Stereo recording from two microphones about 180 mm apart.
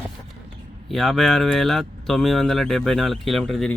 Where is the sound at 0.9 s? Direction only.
Centre (ahead or behind).